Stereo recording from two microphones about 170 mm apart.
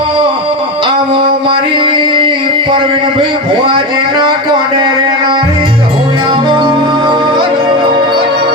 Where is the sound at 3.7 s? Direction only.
30° right (ahead or behind).